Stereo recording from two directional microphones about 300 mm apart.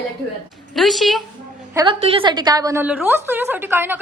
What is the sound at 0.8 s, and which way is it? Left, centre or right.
Speech, centre.